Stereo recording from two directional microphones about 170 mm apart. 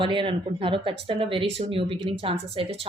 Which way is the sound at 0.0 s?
30° right (ahead or behind).